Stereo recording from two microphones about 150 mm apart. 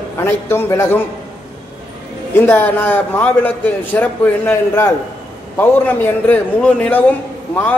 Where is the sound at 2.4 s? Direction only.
15° left (ahead or behind).